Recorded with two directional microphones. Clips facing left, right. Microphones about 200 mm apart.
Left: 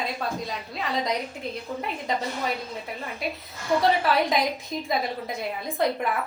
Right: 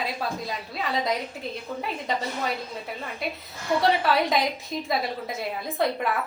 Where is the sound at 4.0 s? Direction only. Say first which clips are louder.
Even; centre (ahead or behind).